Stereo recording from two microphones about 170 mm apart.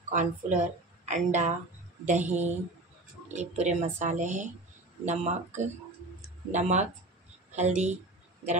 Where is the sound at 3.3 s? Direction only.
40° right (ahead or behind).